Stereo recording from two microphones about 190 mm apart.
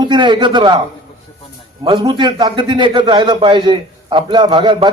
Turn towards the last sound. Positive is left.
turn(degrees=-25)  # may be behind; listen again after turning